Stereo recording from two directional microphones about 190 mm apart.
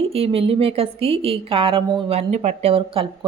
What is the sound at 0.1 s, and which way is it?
A woman's voice, 30° right (ahead or behind).